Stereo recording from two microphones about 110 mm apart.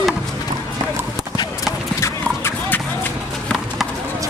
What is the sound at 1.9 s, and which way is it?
Clip-clop, 25° left (ahead or behind).